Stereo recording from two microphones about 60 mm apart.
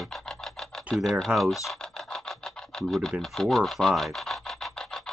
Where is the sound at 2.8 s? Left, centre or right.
Centre.